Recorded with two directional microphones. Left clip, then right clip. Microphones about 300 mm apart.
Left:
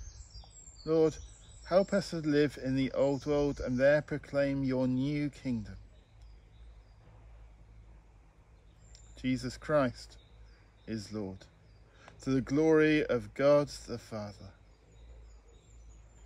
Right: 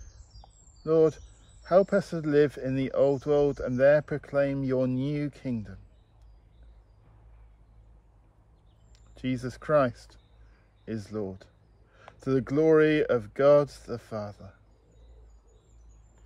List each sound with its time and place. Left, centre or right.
0.8 s speech: right
9.1 s speech: right